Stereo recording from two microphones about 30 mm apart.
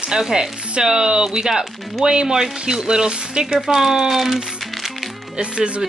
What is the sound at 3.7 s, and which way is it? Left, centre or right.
Speech, centre.